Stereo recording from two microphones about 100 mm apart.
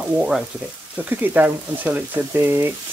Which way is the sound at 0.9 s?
15° right (ahead or behind).